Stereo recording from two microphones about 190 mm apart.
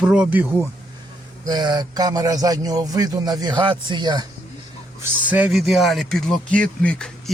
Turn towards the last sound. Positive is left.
turn(degrees=5)  # may be behind; listen again after turning